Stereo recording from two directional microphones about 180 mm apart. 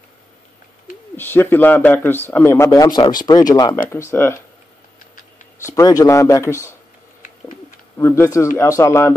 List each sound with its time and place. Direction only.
1.1 s a man's voice: 10° left (ahead or behind)
5.7 s a man's voice: 20° left (ahead or behind)
8.2 s a man's voice: 15° left (ahead or behind)